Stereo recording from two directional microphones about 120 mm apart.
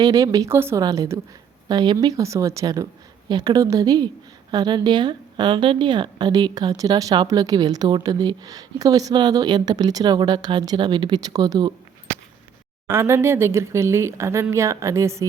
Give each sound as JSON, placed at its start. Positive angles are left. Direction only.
{"t": 0.0, "sound": "speech", "side_deg": -30}
{"t": 0.5, "sound": "speech", "side_deg": -20}
{"t": 0.8, "sound": "speech", "side_deg": -30}
{"t": 1.6, "sound": "speech", "side_deg": -35}
{"t": 12.9, "sound": "speech", "side_deg": -20}